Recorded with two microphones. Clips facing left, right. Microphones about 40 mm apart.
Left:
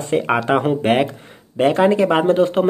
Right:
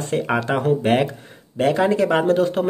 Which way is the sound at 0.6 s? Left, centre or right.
Left.